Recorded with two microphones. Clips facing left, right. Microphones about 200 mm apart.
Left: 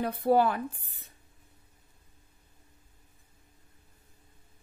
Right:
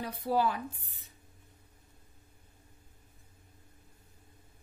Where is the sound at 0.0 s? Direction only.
55° left (ahead or behind).